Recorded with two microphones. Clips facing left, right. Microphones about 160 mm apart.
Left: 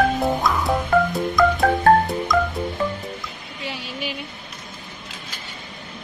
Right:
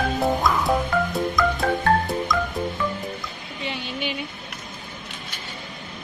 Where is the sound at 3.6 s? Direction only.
5° left (ahead or behind).